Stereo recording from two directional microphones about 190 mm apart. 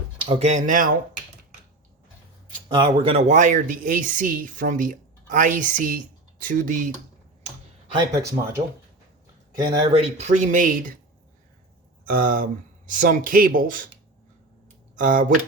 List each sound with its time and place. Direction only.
0.3 s speech: 35° right (ahead or behind)
2.6 s speech: 25° right (ahead or behind); by 6.9 s 45° right (ahead or behind)
7.9 s speech: 20° right (ahead or behind)
9.6 s speech: 25° right (ahead or behind); by 10.9 s 45° right (ahead or behind)
12.0 s speech: 45° right (ahead or behind)
14.9 s speech: 45° right (ahead or behind)